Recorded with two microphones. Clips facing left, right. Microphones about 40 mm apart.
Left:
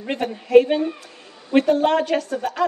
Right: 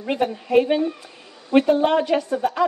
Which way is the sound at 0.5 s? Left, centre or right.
Centre.